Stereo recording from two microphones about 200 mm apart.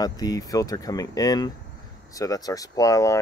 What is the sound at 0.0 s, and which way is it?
Speech, 20° left (ahead or behind).